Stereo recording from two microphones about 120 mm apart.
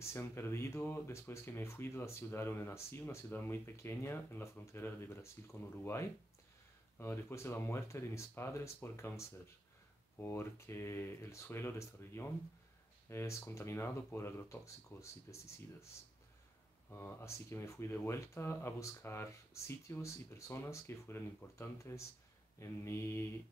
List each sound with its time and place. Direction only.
0.0 s speech: 20° left (ahead or behind)
16.9 s speech: 20° left (ahead or behind)